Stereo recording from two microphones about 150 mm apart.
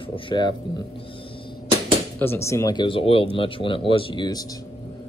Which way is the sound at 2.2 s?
15° left (ahead or behind).